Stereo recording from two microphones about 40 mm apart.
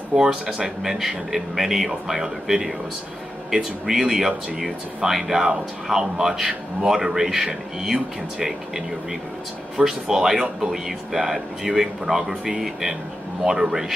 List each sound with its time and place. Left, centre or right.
0.1 s speech: centre
9.8 s speech: centre